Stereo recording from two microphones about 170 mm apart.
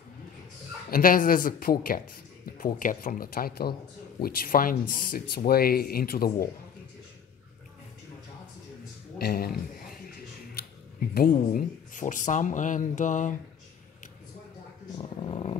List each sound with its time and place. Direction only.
0.8 s speech: 55° left (ahead or behind)
9.2 s speech: 60° left (ahead or behind)
11.1 s speech: 55° left (ahead or behind)
15.0 s speech: 35° left (ahead or behind)